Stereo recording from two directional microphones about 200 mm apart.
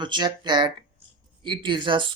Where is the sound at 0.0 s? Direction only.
20° right (ahead or behind).